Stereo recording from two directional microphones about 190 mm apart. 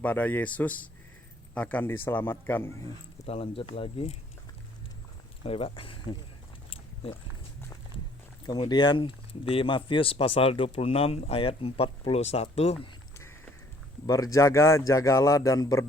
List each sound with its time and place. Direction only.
0.0 s speech: 10° left (ahead or behind)
3.2 s speech: 30° left (ahead or behind)
5.4 s speech: 30° left (ahead or behind)
6.7 s biting: 30° left (ahead or behind)
8.4 s speech: 20° left (ahead or behind)
13.1 s a sound: 10° left (ahead or behind)
14.3 s speech: 15° left (ahead or behind)